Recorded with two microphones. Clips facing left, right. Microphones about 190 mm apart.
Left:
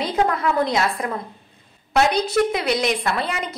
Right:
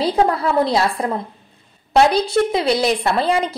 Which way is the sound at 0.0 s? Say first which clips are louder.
Right 4 dB; 30° right (ahead or behind).